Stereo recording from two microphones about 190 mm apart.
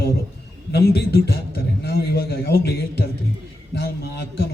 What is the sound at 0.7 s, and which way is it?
A man's voice, 60° left (ahead or behind).